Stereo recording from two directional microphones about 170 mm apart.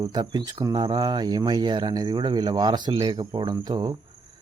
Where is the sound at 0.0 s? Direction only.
25° right (ahead or behind).